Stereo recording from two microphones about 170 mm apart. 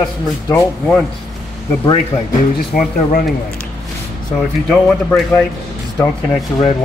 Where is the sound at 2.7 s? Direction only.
55° left (ahead or behind).